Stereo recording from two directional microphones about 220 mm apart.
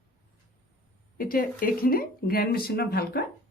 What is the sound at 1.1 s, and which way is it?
Speech, 40° left (ahead or behind).